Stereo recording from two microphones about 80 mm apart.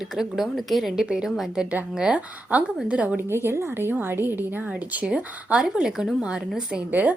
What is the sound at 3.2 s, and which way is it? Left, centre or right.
A woman's voice, right.